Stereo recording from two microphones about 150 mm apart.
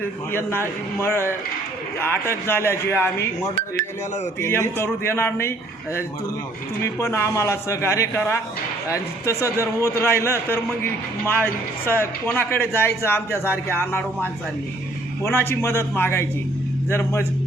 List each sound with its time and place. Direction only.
0.3 s speech: 15° left (ahead or behind)
4.4 s speech: 15° left (ahead or behind)
6.8 s a man's voice: 20° left (ahead or behind)